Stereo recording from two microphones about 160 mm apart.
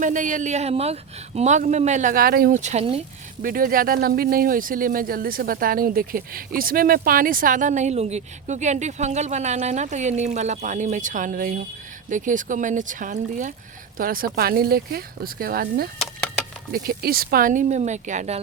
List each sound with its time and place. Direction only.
0.0 s speech: 55° right (ahead or behind); by 2.6 s 70° right (ahead or behind)
2.6 s speech: 45° right (ahead or behind)
3.4 s speech: 60° right (ahead or behind)
14.0 s speech: 65° right (ahead or behind); by 18.4 s 45° right (ahead or behind)